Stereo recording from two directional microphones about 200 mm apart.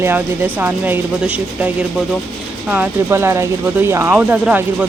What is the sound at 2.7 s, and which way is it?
Speech, 10° right (ahead or behind).